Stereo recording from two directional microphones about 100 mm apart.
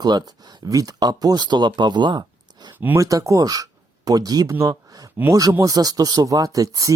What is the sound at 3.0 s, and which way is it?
Speech, 35° right (ahead or behind).